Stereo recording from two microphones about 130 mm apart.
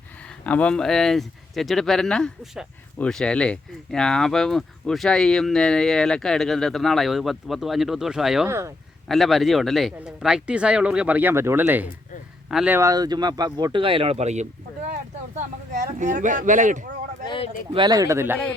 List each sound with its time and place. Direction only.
0.4 s speech: 10° left (ahead or behind)
8.4 s speech: 20° right (ahead or behind)
9.0 s speech: centre (ahead or behind); by 11.9 s 15° right (ahead or behind)
12.5 s speech: 5° right (ahead or behind)
12.7 s speech: 25° right (ahead or behind)
13.8 s speech: 45° right (ahead or behind)
15.4 s speech: 70° right (ahead or behind)
17.2 s speech: 40° left (ahead or behind)
17.7 s speech: 35° right (ahead or behind); by 18.3 s 20° right (ahead or behind)